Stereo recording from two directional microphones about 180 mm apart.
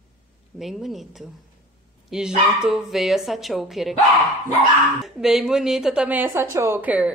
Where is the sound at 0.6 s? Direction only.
Centre (ahead or behind).